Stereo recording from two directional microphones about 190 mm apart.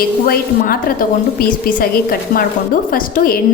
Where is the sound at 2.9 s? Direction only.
50° left (ahead or behind).